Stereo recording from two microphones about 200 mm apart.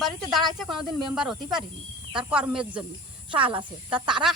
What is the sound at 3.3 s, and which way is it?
Speech, 25° right (ahead or behind).